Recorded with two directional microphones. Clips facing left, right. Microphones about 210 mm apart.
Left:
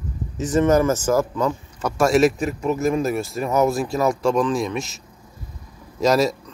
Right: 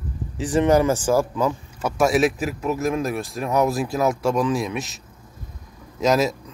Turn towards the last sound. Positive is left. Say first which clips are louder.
# left 1 dB
turn(degrees=0)  # may be behind; listen again after turning